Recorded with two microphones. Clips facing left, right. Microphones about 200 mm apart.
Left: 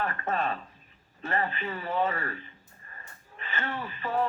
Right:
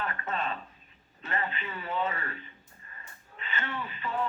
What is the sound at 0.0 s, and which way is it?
Speech, 50° left (ahead or behind).